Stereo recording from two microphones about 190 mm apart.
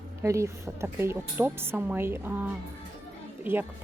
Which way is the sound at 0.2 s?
15° right (ahead or behind).